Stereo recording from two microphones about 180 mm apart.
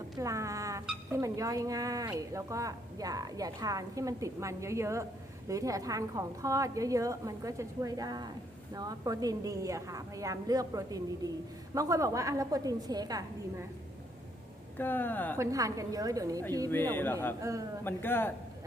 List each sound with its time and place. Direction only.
0.2 s a woman's voice: 15° right (ahead or behind)
14.8 s speech: 10° left (ahead or behind)
15.4 s speech: 20° right (ahead or behind)
16.9 s speech: 10° left (ahead or behind)
17.4 s a woman's voice: 15° right (ahead or behind)
17.8 s speech: 10° left (ahead or behind)